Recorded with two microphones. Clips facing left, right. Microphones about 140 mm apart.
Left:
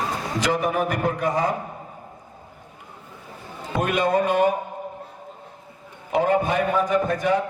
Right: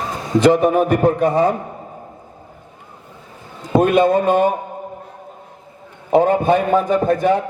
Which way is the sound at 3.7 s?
30° right (ahead or behind).